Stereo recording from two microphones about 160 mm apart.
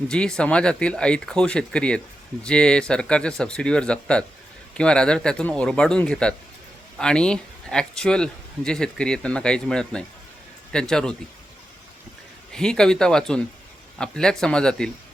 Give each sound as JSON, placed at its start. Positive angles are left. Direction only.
{"t": 0.1, "sound": "speech", "side_deg": 5}
{"t": 12.5, "sound": "speech", "side_deg": 5}